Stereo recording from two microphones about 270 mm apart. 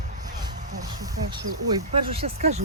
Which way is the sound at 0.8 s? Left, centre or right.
Centre.